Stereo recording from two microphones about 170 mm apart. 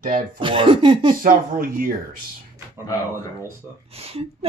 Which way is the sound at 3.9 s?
35° right (ahead or behind).